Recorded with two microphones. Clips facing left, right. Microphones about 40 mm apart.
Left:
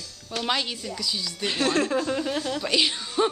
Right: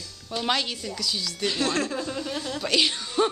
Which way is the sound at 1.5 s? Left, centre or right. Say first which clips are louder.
Left 5 dB; left.